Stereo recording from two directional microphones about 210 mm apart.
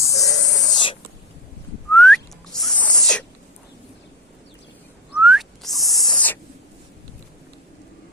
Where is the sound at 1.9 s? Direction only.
5° left (ahead or behind).